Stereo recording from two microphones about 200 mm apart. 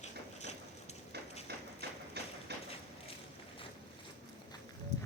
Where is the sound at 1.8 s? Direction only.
55° right (ahead or behind).